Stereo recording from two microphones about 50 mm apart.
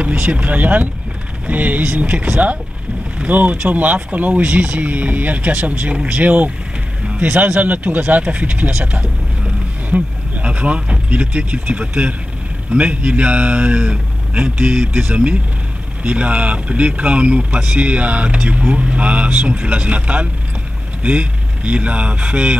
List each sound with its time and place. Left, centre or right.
0.0 s a man's voice: right
9.8 s a man's voice: right